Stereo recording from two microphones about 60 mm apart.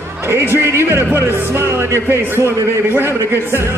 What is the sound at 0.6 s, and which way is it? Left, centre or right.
Music, right.